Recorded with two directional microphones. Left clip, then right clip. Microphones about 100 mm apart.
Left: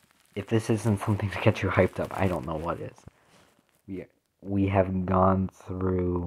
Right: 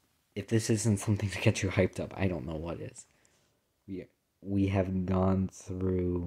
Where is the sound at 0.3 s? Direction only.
25° right (ahead or behind).